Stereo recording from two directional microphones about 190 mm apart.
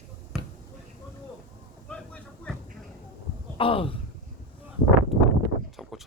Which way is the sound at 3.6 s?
30° left (ahead or behind).